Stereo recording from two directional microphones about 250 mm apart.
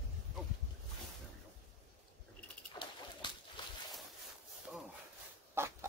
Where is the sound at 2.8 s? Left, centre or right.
Centre.